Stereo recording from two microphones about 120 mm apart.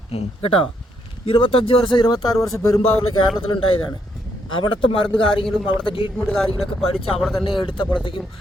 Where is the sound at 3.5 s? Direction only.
40° left (ahead or behind).